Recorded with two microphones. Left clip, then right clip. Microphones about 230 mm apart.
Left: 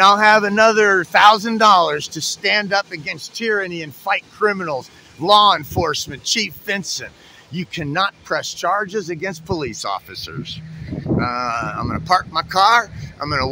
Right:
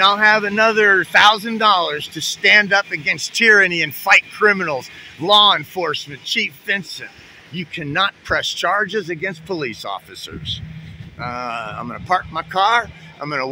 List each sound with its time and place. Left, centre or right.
0.0 s speech: centre
2.1 s speech: centre
5.2 s speech: centre